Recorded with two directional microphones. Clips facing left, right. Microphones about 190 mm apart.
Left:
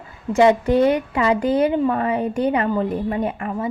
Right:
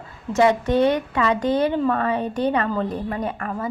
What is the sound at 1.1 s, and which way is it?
Speech, 25° left (ahead or behind).